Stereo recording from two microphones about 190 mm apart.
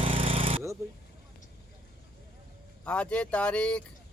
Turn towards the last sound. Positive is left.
turn(degrees=5)  # may be behind; listen again after turning